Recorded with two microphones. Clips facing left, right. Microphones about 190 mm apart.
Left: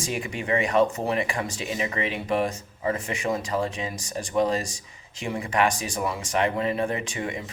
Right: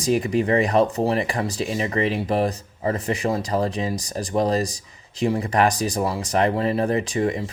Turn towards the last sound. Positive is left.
turn(degrees=-35)  # may be behind; listen again after turning